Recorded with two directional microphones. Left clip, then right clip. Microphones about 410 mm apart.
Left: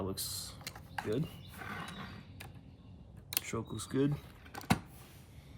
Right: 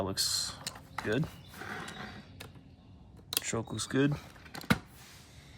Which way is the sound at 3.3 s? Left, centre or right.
Centre.